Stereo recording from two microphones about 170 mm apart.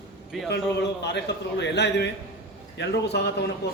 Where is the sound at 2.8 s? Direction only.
80° left.